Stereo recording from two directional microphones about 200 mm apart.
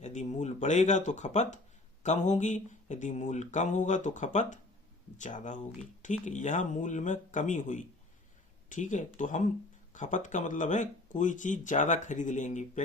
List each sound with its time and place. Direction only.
0.0 s speech: 35° left (ahead or behind)